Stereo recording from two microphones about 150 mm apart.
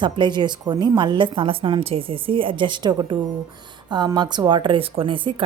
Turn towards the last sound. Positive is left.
turn(degrees=-35)  # may be behind; listen again after turning